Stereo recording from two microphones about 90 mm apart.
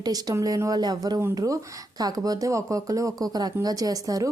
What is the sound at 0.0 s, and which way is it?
Speech, 45° right (ahead or behind).